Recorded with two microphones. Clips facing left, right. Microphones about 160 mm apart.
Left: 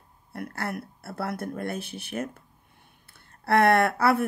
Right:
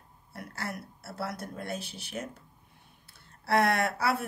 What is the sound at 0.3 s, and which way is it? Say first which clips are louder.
Speech: left 6 dB; 55° left (ahead or behind).